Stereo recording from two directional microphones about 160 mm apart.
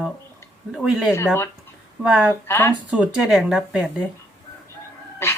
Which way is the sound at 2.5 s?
15° left (ahead or behind).